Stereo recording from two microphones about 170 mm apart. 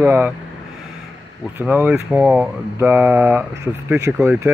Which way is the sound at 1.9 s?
10° right (ahead or behind).